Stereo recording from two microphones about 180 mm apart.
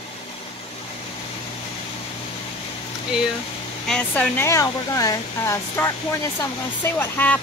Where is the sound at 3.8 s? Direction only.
5° left (ahead or behind).